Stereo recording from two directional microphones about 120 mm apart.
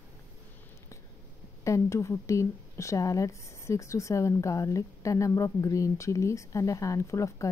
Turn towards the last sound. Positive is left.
turn(degrees=25)  # may be behind; listen again after turning